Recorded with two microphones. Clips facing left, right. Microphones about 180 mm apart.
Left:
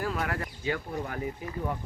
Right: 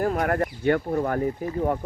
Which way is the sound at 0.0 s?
50° right (ahead or behind).